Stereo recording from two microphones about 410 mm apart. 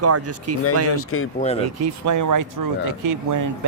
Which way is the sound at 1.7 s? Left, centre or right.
Right.